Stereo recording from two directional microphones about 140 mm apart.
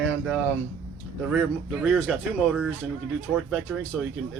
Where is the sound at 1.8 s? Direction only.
Centre (ahead or behind).